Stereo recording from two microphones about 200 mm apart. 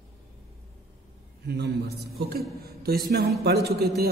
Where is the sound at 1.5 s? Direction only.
55° right (ahead or behind).